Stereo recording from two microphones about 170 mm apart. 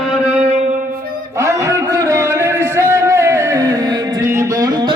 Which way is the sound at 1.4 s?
15° right (ahead or behind).